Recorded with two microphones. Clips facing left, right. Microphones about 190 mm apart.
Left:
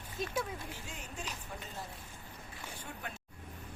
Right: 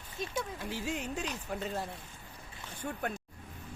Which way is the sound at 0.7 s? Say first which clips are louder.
Right 11 dB; 90° right.